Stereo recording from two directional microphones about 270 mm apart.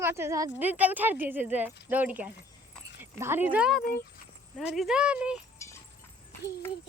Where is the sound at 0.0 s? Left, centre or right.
Centre.